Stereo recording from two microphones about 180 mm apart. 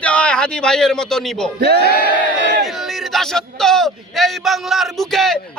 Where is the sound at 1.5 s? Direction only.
60° right (ahead or behind).